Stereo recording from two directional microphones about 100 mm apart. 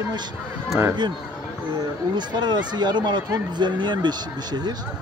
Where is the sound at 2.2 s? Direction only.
45° right (ahead or behind).